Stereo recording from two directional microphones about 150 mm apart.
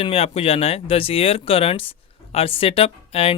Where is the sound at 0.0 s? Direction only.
40° left (ahead or behind).